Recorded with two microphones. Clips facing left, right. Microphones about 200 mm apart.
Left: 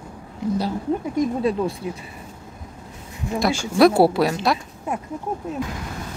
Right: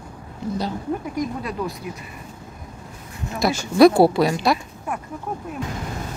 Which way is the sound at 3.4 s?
Centre (ahead or behind).